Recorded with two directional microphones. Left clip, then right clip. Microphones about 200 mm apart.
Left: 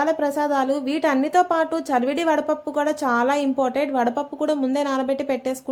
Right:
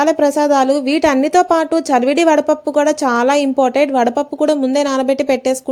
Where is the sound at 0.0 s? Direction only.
35° right (ahead or behind).